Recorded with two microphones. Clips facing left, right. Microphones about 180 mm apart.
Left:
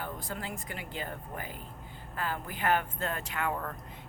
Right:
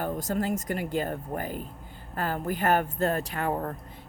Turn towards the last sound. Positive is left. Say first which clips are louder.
# right 5 dB
turn(degrees=-35)  # may be behind; listen again after turning